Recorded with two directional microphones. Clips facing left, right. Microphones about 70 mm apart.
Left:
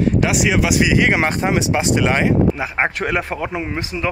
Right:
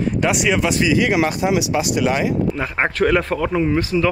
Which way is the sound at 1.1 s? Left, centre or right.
Left.